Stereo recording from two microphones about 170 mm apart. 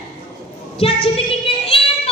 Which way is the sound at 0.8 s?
35° left (ahead or behind).